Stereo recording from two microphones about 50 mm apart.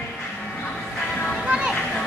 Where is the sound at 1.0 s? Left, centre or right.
Centre.